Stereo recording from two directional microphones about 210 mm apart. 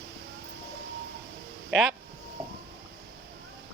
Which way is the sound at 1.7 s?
Centre (ahead or behind).